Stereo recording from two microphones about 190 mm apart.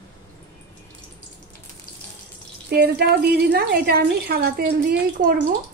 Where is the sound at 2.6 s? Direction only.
55° right (ahead or behind).